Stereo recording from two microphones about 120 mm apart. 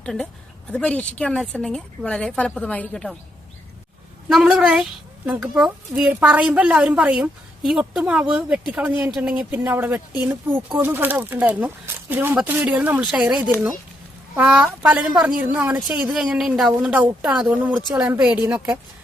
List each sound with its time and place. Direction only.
0.0 s a woman's voice: 10° left (ahead or behind)
4.3 s a woman's voice: 5° right (ahead or behind)